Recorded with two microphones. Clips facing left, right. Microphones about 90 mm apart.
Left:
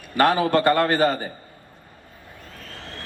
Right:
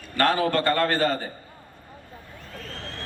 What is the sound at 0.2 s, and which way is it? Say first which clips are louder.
A man's voice: left 3 dB; 15° left (ahead or behind).